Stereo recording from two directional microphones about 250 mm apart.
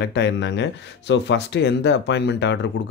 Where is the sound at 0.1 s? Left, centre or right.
Left.